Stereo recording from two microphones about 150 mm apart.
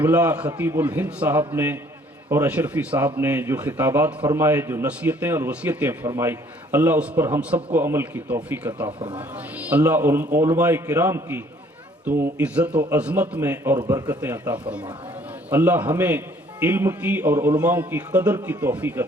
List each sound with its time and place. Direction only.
0.0 s a man's voice: 10° right (ahead or behind)
8.9 s speech: 35° right (ahead or behind)
9.1 s a man's voice: 10° right (ahead or behind)
13.7 s a man's voice: 25° right (ahead or behind)
14.2 s a man's voice: 15° right (ahead or behind)